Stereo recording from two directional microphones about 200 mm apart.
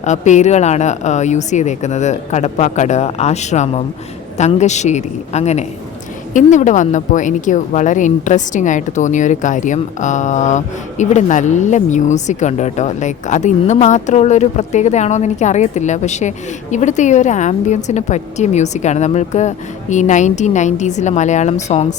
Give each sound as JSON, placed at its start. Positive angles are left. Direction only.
{"t": 0.0, "sound": "speech", "side_deg": 35}